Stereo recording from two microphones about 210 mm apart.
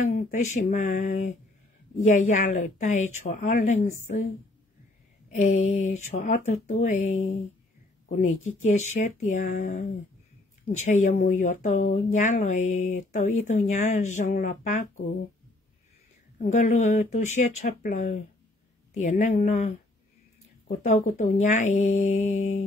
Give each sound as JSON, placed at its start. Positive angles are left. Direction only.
{"t": 0.0, "sound": "speech", "side_deg": 35}
{"t": 5.3, "sound": "speech", "side_deg": 35}
{"t": 8.3, "sound": "speech", "side_deg": 85}
{"t": 8.6, "sound": "speech", "side_deg": 35}
{"t": 16.4, "sound": "speech", "side_deg": 35}
{"t": 20.8, "sound": "speech", "side_deg": 35}